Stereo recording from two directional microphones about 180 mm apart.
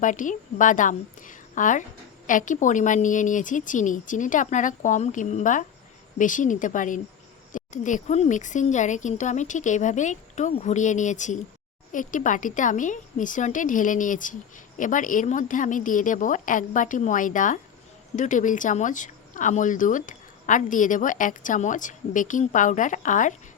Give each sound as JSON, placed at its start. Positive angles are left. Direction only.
{"t": 0.0, "sound": "speech", "side_deg": 45}